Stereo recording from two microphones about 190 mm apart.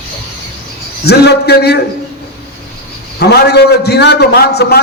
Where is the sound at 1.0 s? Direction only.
60° left (ahead or behind).